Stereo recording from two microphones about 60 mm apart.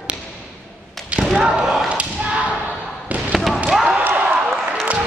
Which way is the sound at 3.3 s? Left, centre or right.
Centre.